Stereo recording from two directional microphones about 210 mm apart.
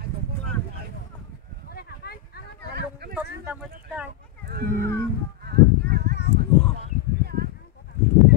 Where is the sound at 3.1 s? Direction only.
5° right (ahead or behind).